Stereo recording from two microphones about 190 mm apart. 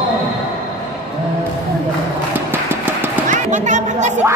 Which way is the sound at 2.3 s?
10° right (ahead or behind).